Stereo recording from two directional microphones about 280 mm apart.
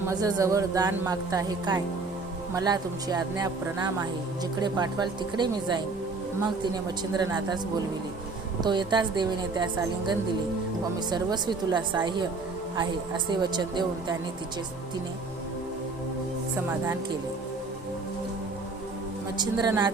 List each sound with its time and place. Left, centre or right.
0.0 s a woman's voice: centre
7.2 s a woman's voice: centre
8.6 s a woman's voice: centre
11.1 s a woman's voice: centre
16.6 s a woman's voice: centre
19.4 s a woman's voice: centre